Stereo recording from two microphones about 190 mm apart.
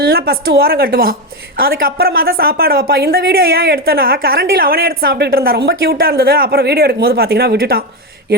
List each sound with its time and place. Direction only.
0.0 s speech: 55° right (ahead or behind)